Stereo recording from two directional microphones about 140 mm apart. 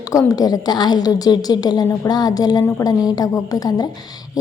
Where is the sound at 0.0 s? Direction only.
25° left (ahead or behind).